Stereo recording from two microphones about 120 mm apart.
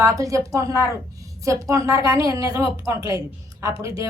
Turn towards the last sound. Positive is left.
turn(degrees=-25)  # may be behind; listen again after turning